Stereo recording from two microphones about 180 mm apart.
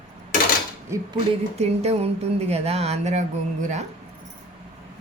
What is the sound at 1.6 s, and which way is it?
Speech, 35° right (ahead or behind).